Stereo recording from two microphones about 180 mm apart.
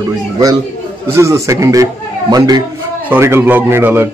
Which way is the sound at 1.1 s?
15° right (ahead or behind).